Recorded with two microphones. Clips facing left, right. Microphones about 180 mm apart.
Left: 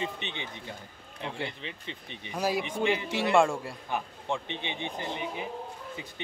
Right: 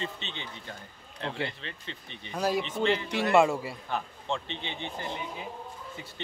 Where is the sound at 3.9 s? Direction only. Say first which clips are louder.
Left 1 dB; 15° left (ahead or behind).